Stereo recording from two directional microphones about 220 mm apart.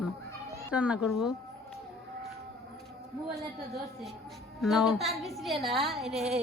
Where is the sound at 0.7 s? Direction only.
5° right (ahead or behind).